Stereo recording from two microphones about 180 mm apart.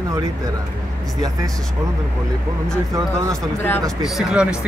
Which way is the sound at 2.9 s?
15° right (ahead or behind).